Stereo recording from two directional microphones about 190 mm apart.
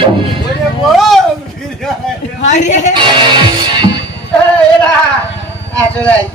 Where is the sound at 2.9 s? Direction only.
25° right (ahead or behind).